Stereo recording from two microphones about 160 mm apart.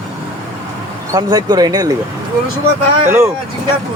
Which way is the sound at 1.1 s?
25° right (ahead or behind).